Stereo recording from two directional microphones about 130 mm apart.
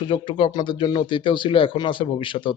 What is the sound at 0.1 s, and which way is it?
A man's voice, 40° left (ahead or behind).